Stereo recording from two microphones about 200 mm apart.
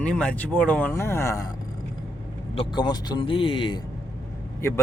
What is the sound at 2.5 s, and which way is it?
A man's voice, 25° left (ahead or behind).